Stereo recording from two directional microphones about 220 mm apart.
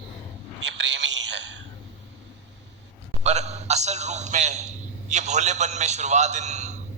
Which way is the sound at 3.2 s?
30° right (ahead or behind).